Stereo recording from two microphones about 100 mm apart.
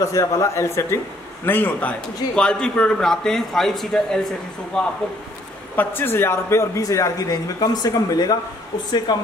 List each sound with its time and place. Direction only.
0.0 s a man's voice: 30° left (ahead or behind); by 4.9 s 5° left (ahead or behind)
5.8 s a man's voice: 20° left (ahead or behind); by 9.2 s 45° left (ahead or behind)